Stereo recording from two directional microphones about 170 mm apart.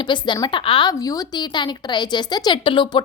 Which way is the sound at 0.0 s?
25° left (ahead or behind).